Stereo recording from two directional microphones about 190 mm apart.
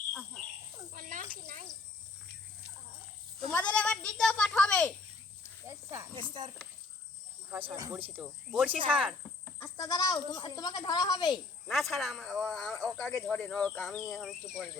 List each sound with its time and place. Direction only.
0.9 s cricket: 45° right (ahead or behind)
3.5 s a sound: 5° left (ahead or behind)
5.6 s snake: 15° right (ahead or behind)
7.5 s speech: 10° right (ahead or behind)
9.6 s speech: 15° left (ahead or behind)
11.7 s speech: centre (ahead or behind)